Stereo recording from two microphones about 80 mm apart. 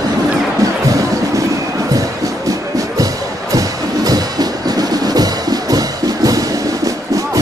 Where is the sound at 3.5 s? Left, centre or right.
Right.